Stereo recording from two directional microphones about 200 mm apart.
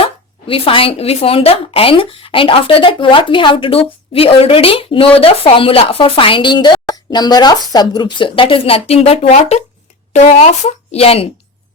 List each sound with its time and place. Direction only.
0.0 s speech: 30° left (ahead or behind)